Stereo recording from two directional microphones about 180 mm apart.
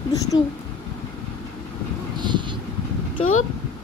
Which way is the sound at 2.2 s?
25° right (ahead or behind).